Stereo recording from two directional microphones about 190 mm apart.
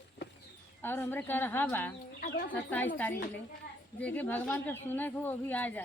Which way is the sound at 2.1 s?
50° left (ahead or behind).